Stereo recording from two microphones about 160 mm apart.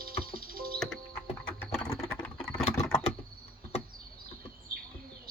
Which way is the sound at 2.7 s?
20° left (ahead or behind).